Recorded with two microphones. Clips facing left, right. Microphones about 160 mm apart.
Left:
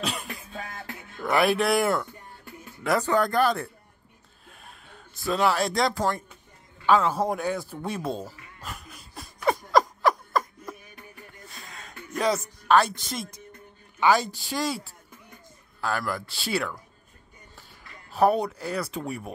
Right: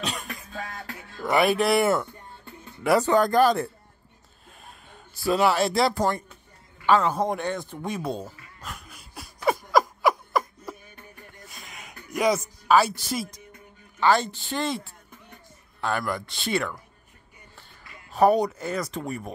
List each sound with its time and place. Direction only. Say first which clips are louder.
0.0 s music: left 1 dB; centre (ahead or behind)
1.2 s a man's voice: right 1 dB; centre (ahead or behind)
3.0 s speech: right 3 dB; 20° right (ahead or behind)
4.5 s a man's voice: right 1 dB; 5° right (ahead or behind)
8.5 s laughter: left 1 dB; centre (ahead or behind)
11.4 s a sound: even; 15° right (ahead or behind)
14.1 s a woman's voice: right 1 dB; 10° left (ahead or behind)
18.1 s a man's voice: right 2 dB; centre (ahead or behind)